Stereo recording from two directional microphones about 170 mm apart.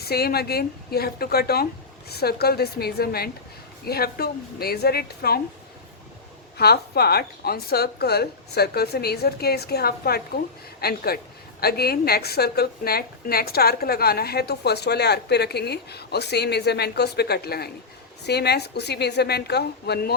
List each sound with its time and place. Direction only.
0.0 s a woman's voice: 65° left (ahead or behind)
6.6 s a woman's voice: 70° left (ahead or behind)